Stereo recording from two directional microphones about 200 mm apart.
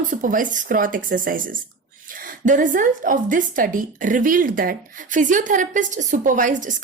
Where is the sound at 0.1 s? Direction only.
40° right (ahead or behind).